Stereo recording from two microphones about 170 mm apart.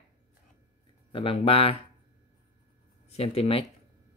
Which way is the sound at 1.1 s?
35° left (ahead or behind).